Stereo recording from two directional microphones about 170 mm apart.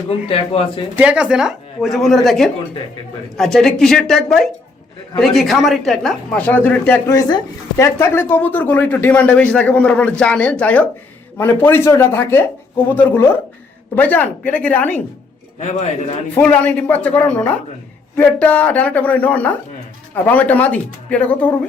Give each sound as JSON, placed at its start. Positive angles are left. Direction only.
{"t": 0.1, "sound": "speech", "side_deg": 35}
{"t": 0.9, "sound": "speech", "side_deg": -5}
{"t": 16.3, "sound": "speech", "side_deg": 10}